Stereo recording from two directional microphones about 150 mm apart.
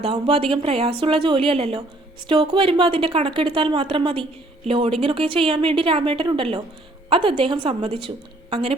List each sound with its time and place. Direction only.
0.0 s a woman's voice: 40° right (ahead or behind)
2.2 s a woman's voice: 30° right (ahead or behind)